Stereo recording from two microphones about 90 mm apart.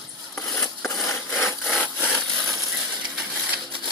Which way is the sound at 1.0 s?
30° left (ahead or behind).